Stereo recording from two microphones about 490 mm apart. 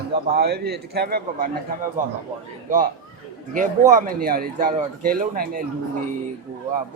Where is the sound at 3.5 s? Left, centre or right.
Centre.